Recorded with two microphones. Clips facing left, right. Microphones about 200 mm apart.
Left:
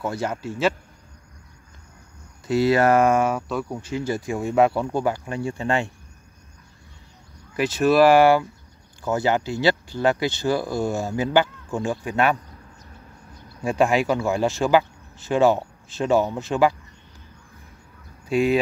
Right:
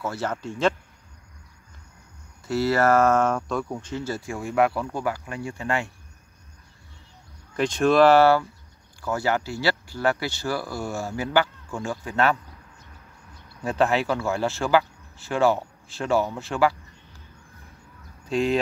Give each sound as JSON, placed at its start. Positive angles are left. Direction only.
{"t": 0.0, "sound": "speech", "side_deg": 15}
{"t": 2.4, "sound": "speech", "side_deg": 15}
{"t": 7.5, "sound": "speech", "side_deg": 5}
{"t": 13.6, "sound": "speech", "side_deg": 10}
{"t": 18.2, "sound": "speech", "side_deg": 10}